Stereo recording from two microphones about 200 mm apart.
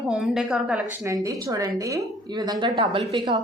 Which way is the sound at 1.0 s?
15° right (ahead or behind).